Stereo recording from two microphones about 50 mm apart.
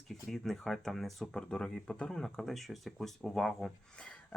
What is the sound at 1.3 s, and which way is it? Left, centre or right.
Speech, centre.